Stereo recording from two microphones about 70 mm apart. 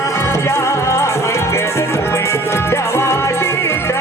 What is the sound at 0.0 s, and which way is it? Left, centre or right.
Music, left.